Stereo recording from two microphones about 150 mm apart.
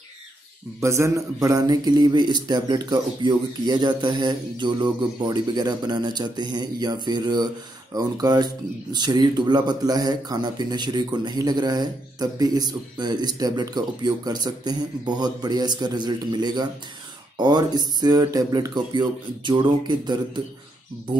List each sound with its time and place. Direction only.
0.7 s a man's voice: 20° right (ahead or behind)